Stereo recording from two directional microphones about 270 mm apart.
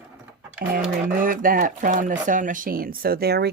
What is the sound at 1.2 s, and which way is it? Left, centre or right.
Speech, right.